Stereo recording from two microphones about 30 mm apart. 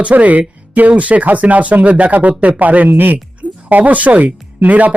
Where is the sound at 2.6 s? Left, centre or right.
Right.